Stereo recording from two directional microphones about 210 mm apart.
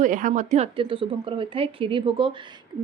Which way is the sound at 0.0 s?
35° right (ahead or behind).